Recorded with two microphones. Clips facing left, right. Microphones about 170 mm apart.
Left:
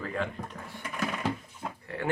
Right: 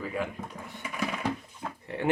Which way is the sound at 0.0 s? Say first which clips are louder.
Even; 5° right (ahead or behind).